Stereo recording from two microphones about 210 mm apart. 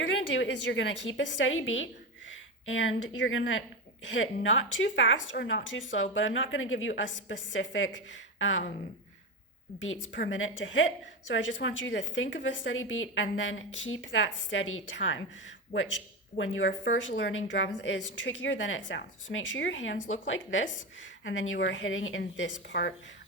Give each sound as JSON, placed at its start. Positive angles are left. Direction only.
{"t": 0.3, "sound": "a woman's voice", "side_deg": 60}
{"t": 9.8, "sound": "a woman's voice", "side_deg": 65}
{"t": 16.4, "sound": "a woman's voice", "side_deg": 65}